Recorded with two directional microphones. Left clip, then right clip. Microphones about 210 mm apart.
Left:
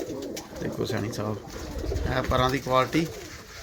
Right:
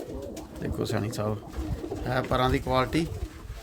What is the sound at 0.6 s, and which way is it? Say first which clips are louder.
Speech: left 1 dB; 20° right (ahead or behind).